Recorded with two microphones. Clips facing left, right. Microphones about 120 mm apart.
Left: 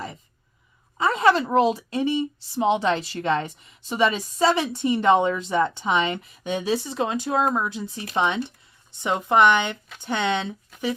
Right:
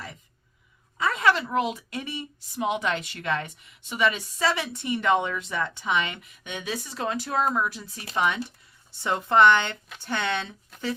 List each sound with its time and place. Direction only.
0.9 s speech: 30° left (ahead or behind)
10.7 s speech: centre (ahead or behind)